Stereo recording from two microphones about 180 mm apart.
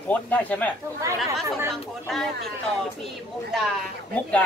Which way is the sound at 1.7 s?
Centre (ahead or behind).